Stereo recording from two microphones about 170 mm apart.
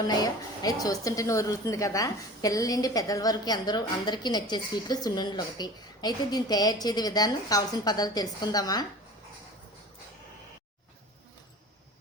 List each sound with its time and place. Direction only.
0.1 s a woman's voice: 20° left (ahead or behind)